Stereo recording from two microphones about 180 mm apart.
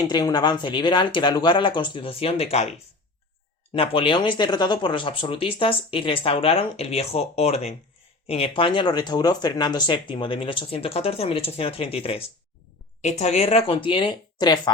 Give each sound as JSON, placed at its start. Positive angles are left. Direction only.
{"t": 0.1, "sound": "speech", "side_deg": 20}